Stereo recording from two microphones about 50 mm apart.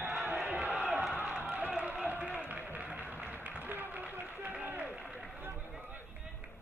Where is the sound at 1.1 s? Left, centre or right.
Right.